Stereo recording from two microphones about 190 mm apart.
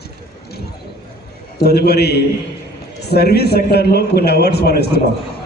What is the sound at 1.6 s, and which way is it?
A man's voice, 60° left (ahead or behind).